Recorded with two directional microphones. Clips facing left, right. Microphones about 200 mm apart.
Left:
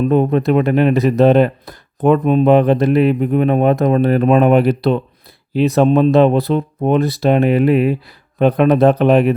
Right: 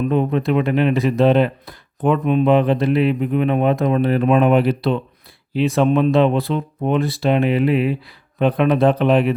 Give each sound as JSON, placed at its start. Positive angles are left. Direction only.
{"t": 0.0, "sound": "speech", "side_deg": 45}